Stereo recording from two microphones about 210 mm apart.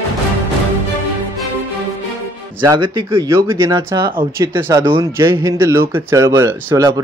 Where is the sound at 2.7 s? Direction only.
10° right (ahead or behind).